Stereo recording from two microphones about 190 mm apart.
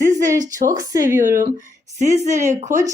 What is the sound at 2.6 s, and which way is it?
Speech, 15° right (ahead or behind).